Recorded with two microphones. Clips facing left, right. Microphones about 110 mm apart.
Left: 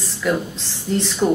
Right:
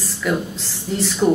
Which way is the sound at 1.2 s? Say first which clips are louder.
Right 2 dB; centre (ahead or behind).